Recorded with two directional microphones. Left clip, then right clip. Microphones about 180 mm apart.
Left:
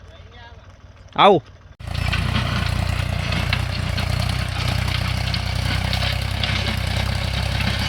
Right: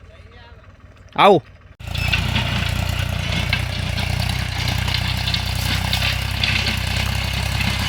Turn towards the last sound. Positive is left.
turn(degrees=-10)  # may be behind; listen again after turning